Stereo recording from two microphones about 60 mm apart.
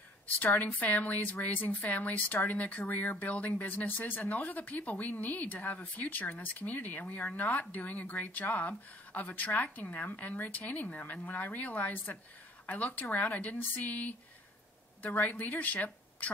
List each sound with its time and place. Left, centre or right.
0.4 s a woman's voice: left